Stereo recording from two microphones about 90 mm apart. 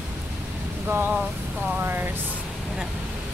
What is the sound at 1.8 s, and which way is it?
Speech, 25° right (ahead or behind).